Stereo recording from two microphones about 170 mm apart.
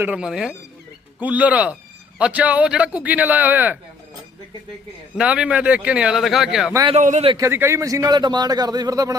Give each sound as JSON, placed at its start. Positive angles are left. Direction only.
{"t": 0.0, "sound": "speech", "side_deg": -5}
{"t": 5.1, "sound": "speech", "side_deg": -5}
{"t": 6.8, "sound": "a man's voice", "side_deg": -45}
{"t": 7.3, "sound": "a man's voice", "side_deg": -15}